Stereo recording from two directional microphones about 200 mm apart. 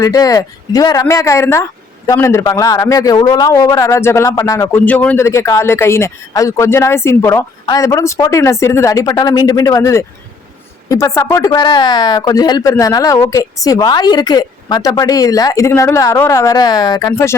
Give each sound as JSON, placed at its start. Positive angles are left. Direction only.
{"t": 0.0, "sound": "a man's voice", "side_deg": 15}